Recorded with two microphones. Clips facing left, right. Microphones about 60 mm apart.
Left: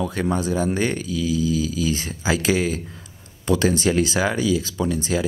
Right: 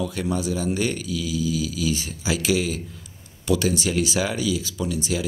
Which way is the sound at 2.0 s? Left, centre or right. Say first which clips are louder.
Left 3 dB; left.